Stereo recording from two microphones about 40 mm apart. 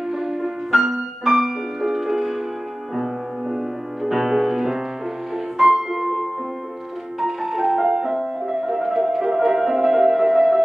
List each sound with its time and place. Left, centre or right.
0.1 s music: centre